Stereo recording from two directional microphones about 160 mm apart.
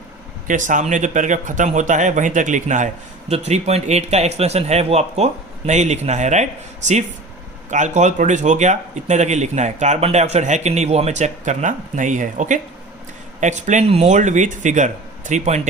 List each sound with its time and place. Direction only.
0.4 s speech: 55° right (ahead or behind)